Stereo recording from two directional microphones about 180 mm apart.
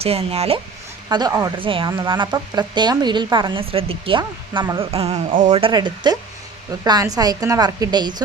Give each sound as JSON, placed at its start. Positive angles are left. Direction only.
{"t": 0.0, "sound": "speech", "side_deg": -35}
{"t": 1.1, "sound": "speech", "side_deg": -20}
{"t": 1.5, "sound": "speech", "side_deg": -30}
{"t": 4.9, "sound": "speech", "side_deg": -35}